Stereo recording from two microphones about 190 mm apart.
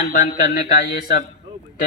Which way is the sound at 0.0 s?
45° left (ahead or behind).